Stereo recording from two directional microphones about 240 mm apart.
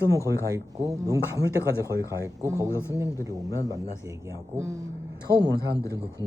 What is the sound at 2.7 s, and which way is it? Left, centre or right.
A man's voice, centre.